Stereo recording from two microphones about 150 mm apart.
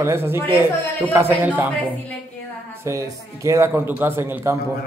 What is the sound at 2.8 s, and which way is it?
A man's voice, 20° right (ahead or behind).